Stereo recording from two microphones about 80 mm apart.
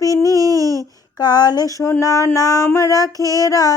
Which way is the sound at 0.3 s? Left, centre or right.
Right.